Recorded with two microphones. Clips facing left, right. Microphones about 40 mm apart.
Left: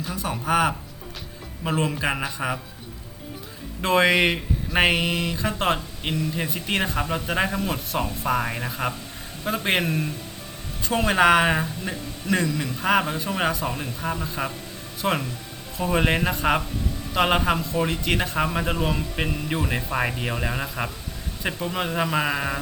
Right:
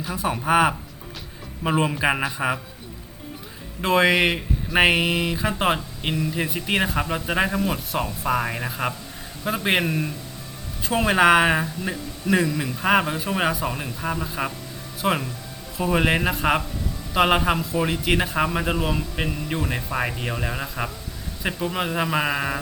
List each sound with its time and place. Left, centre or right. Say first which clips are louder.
0.0 s speech: right 3 dB; centre
3.8 s a man's voice: right 1 dB; centre